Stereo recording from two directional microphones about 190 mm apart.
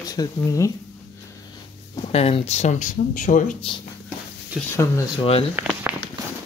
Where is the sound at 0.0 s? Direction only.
20° left (ahead or behind).